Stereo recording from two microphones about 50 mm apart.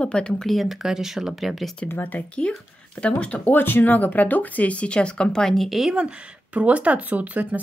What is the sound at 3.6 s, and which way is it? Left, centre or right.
Speech, left.